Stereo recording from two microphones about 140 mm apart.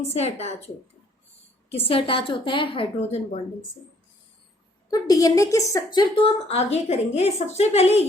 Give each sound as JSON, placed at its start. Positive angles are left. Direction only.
{"t": 0.0, "sound": "a woman's voice", "side_deg": 50}
{"t": 1.7, "sound": "a woman's voice", "side_deg": 40}
{"t": 4.9, "sound": "a woman's voice", "side_deg": 25}